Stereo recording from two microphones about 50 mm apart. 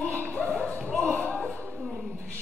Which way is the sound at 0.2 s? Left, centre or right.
Left.